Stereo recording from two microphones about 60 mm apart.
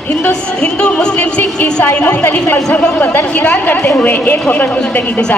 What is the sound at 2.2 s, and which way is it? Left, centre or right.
A woman's voice, left.